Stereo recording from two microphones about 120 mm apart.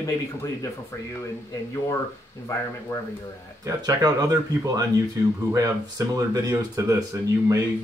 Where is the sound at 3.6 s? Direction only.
30° right (ahead or behind).